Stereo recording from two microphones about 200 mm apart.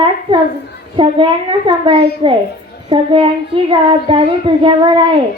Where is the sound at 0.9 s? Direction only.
25° right (ahead or behind).